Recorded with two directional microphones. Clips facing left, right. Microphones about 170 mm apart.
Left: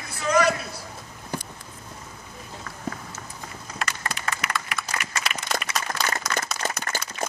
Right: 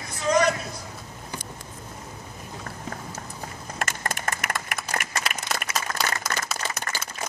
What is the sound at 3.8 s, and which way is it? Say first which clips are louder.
Horse: right 1 dB; 50° right (ahead or behind).